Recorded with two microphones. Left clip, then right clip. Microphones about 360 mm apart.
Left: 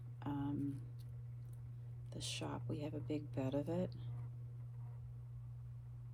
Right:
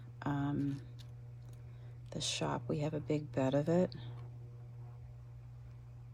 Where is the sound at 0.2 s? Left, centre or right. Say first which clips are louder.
Right 6 dB; right.